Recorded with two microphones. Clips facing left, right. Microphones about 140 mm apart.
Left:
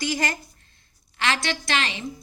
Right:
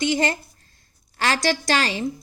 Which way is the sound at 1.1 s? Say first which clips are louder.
Right 4 dB; 40° right (ahead or behind).